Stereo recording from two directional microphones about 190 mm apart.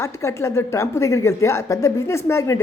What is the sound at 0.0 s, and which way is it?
A woman's voice, 15° left (ahead or behind).